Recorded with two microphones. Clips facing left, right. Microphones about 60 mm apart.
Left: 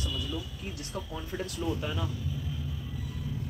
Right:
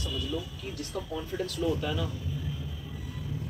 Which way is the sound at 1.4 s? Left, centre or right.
Left.